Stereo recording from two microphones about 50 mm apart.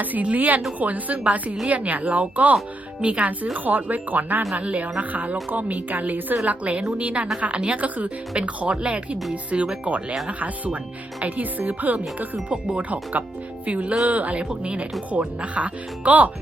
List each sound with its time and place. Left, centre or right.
0.0 s a woman's voice: right
13.7 s speech: right